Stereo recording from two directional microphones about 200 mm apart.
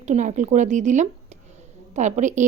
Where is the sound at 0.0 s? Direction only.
35° right (ahead or behind).